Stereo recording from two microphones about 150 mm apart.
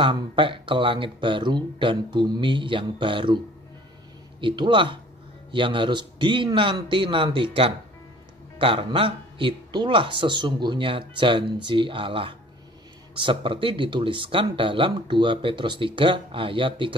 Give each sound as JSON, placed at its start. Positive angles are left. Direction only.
{"t": 0.0, "sound": "speech", "side_deg": -35}
{"t": 4.4, "sound": "speech", "side_deg": -35}